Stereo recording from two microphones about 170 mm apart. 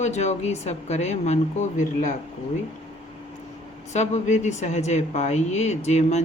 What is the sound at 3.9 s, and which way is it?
Speech, 45° left (ahead or behind).